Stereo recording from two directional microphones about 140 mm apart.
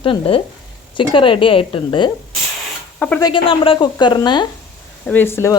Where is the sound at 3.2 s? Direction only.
40° left (ahead or behind).